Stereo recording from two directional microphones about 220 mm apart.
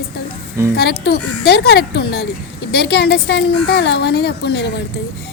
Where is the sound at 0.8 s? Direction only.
45° left (ahead or behind).